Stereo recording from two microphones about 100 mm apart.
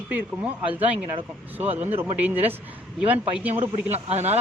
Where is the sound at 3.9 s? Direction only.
90° right.